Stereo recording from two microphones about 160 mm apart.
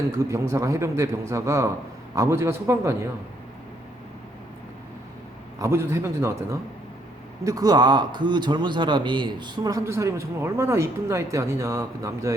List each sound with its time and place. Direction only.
0.2 s a man's voice: 20° right (ahead or behind)
5.5 s a man's voice: 15° right (ahead or behind)